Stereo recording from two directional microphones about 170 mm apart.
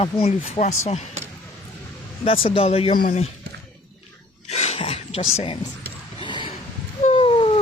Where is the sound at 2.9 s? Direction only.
55° left (ahead or behind).